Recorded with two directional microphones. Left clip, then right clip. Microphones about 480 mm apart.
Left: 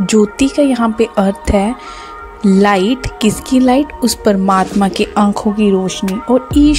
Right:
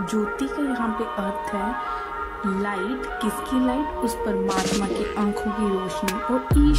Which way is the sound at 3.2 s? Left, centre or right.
Right.